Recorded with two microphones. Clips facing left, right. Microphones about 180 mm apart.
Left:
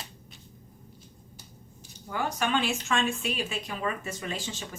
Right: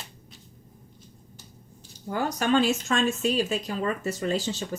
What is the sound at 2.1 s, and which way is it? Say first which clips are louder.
Speech: right 5 dB; 40° right (ahead or behind).